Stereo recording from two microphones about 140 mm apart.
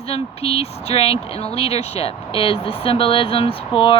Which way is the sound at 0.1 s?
45° left (ahead or behind).